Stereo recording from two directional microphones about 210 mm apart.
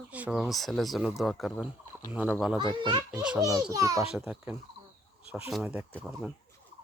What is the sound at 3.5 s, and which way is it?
Speech, 15° right (ahead or behind).